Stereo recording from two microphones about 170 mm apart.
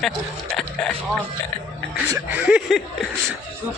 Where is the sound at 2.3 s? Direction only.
5° right (ahead or behind).